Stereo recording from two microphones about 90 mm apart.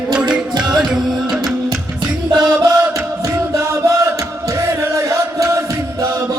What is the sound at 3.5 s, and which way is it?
Music, 35° right (ahead or behind).